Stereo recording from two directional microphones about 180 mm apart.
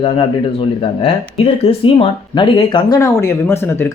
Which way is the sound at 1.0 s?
30° left (ahead or behind).